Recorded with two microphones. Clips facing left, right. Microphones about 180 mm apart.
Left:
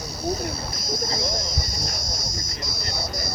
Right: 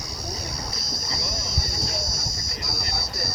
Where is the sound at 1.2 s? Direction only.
20° left (ahead or behind).